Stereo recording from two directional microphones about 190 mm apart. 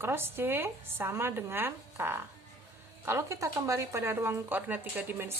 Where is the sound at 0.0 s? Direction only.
10° right (ahead or behind).